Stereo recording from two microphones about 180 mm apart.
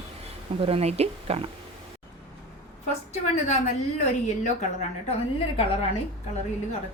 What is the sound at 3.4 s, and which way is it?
Speech, 40° left (ahead or behind).